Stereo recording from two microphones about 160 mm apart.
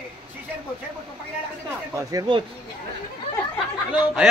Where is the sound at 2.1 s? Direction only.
25° right (ahead or behind).